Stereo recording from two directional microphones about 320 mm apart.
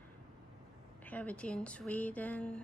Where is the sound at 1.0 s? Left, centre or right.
Centre.